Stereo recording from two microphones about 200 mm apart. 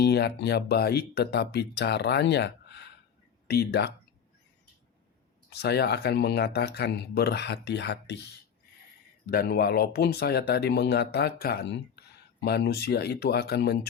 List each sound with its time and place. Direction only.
0.0 s speech: 55° left (ahead or behind)
5.5 s speech: 55° left (ahead or behind)
9.2 s speech: 50° left (ahead or behind)